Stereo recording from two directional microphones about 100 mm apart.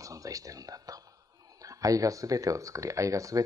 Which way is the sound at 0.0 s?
35° right (ahead or behind).